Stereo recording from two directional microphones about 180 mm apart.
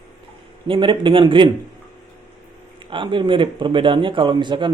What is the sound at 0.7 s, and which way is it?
Speech, 25° right (ahead or behind).